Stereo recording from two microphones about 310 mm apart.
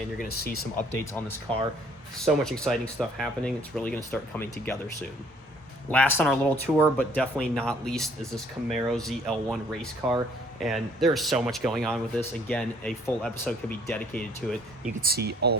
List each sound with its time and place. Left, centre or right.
0.4 s speech: left
2.2 s speech: centre
5.9 s speech: centre
14.8 s speech: right